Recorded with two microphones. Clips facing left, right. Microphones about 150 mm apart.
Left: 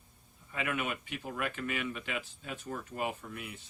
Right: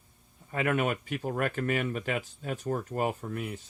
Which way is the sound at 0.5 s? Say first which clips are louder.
Right 7 dB; 45° right (ahead or behind).